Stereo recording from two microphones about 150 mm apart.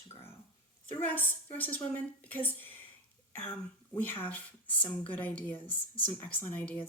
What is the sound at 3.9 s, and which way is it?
Speech, 10° left (ahead or behind).